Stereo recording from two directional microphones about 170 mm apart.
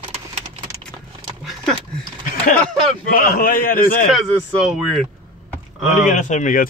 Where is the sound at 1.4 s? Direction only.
5° left (ahead or behind).